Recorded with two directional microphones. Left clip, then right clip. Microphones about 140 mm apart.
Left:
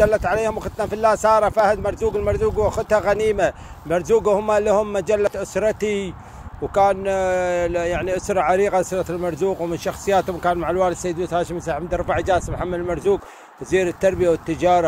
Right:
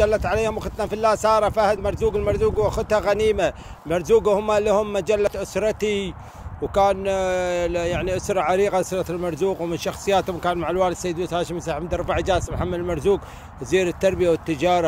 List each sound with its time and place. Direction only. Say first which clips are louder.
0.0 s speech: left 2 dB; 10° right (ahead or behind)